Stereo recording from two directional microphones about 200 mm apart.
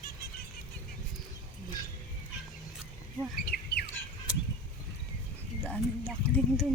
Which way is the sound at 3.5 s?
45° left (ahead or behind).